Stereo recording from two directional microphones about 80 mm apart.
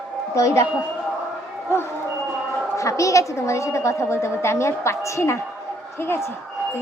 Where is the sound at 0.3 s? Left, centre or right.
Left.